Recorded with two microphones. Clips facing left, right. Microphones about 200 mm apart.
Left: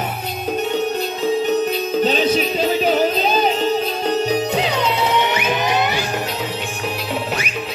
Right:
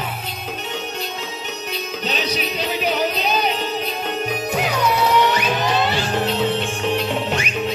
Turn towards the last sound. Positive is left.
turn(degrees=15)  # may be behind; listen again after turning